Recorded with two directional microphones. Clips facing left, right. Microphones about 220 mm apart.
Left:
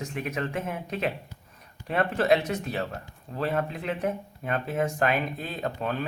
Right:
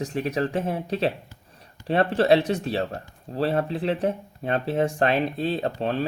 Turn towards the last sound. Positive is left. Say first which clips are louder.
# right 4 dB
turn(degrees=-30)  # may be behind; listen again after turning